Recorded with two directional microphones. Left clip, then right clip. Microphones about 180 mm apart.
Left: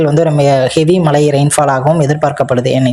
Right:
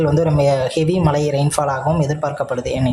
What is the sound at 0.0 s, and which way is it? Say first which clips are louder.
Speech: left 5 dB; 25° left (ahead or behind).